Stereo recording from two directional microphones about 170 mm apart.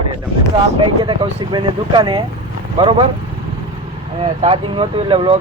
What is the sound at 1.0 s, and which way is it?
Speech, 30° right (ahead or behind).